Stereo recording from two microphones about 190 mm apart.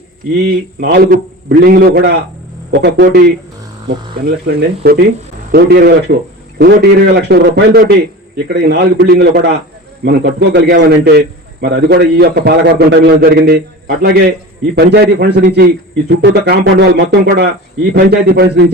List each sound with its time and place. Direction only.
0.4 s a man's voice: 55° right (ahead or behind)